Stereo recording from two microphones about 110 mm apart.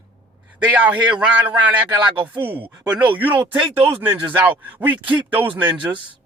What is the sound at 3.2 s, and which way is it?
Speech, 15° right (ahead or behind).